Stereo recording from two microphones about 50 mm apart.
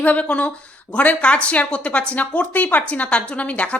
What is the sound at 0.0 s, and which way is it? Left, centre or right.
A woman's voice, left.